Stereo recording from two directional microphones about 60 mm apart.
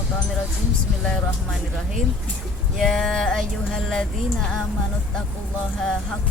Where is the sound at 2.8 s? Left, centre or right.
Centre.